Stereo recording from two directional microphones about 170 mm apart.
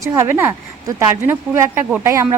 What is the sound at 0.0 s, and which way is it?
Speech, 15° right (ahead or behind).